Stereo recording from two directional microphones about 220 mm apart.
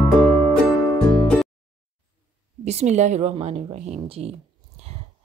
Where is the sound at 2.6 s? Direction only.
30° right (ahead or behind).